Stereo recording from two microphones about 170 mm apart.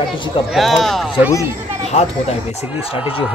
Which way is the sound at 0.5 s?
Centre (ahead or behind).